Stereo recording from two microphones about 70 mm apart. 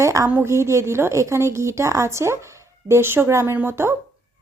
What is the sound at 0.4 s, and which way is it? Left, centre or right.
Speech, right.